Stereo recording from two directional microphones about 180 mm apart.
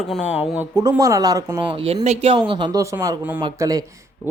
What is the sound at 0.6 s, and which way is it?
Speech, 15° right (ahead or behind).